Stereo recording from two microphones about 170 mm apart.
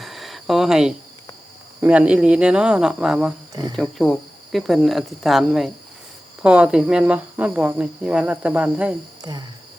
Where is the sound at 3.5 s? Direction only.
25° right (ahead or behind).